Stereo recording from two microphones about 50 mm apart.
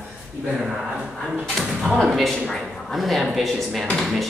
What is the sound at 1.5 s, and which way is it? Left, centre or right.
Speech, centre.